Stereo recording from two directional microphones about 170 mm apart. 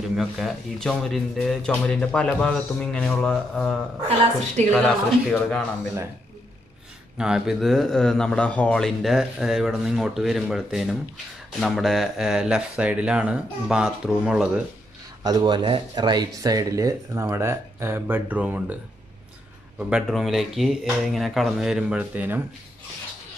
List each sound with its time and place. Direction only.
0.1 s speech: centre (ahead or behind)
7.2 s speech: 5° right (ahead or behind)
15.2 s speech: 30° right (ahead or behind); by 18.8 s 10° right (ahead or behind)
19.8 s speech: 5° right (ahead or behind)